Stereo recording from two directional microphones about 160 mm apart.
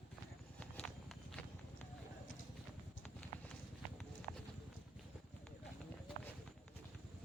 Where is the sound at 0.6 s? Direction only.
5° left (ahead or behind).